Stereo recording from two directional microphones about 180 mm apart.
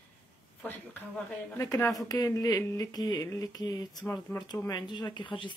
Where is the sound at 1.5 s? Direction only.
15° left (ahead or behind).